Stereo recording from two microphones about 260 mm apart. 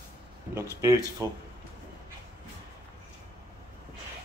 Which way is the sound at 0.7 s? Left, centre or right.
Centre.